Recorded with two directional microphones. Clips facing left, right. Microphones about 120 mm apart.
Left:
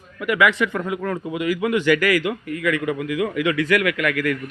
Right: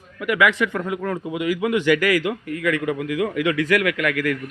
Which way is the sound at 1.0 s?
15° right (ahead or behind).